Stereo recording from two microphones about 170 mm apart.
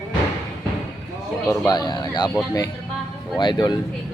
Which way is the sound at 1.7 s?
25° left (ahead or behind).